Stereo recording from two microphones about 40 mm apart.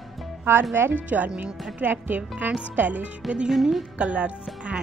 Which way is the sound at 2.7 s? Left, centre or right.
Right.